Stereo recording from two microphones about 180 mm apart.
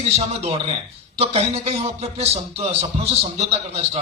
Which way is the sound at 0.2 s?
35° right (ahead or behind).